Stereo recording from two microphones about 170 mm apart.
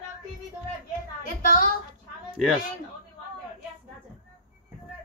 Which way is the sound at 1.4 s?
55° left (ahead or behind).